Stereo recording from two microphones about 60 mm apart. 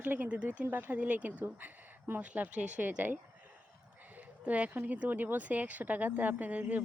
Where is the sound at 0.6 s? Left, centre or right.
Right.